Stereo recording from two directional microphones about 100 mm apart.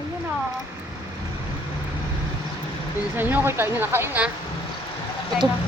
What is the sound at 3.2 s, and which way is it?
Speech, 20° right (ahead or behind).